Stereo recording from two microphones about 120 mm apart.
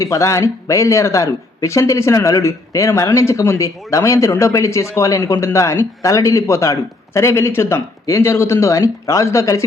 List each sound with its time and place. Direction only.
0.0 s speech: 25° left (ahead or behind)